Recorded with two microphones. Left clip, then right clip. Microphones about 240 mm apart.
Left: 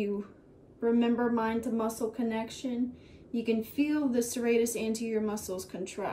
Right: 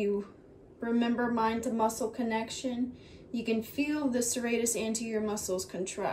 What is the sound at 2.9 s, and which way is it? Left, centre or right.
Speech, right.